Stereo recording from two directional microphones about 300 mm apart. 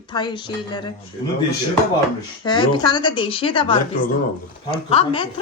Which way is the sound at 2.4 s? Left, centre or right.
Centre.